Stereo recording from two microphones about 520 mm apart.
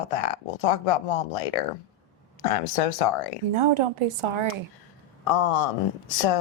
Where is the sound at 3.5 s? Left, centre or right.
Right.